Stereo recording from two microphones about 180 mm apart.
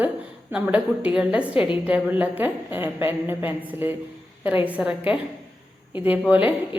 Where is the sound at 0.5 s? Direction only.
5° right (ahead or behind).